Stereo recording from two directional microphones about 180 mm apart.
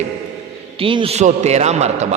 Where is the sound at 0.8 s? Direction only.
30° right (ahead or behind).